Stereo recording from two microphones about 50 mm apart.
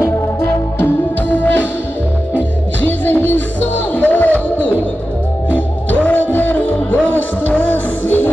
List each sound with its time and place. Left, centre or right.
1.3 s music: left
2.8 s music: left
5.9 s music: left